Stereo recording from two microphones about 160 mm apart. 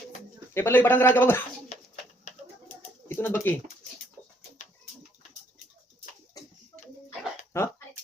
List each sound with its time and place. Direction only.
0.5 s speech: 15° left (ahead or behind)
3.1 s speech: 15° left (ahead or behind)
7.5 s speech: 15° left (ahead or behind)